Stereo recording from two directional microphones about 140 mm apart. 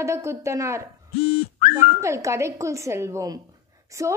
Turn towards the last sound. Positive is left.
turn(degrees=-20)  # may be behind; listen again after turning